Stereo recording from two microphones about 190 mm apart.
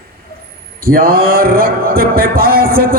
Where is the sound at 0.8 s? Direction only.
50° right (ahead or behind).